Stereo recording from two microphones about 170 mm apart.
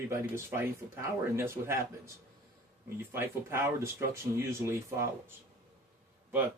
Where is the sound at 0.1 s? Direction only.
15° right (ahead or behind).